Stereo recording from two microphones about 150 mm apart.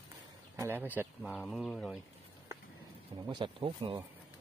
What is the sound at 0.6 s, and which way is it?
Speech, 15° right (ahead or behind).